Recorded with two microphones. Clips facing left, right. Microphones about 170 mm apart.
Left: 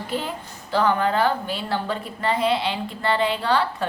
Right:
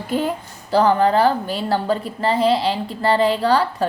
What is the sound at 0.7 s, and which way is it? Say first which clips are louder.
A woman's voice: right 5 dB; 35° right (ahead or behind).